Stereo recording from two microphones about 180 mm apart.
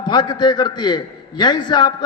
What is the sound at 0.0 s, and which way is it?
A man's voice, 25° left (ahead or behind).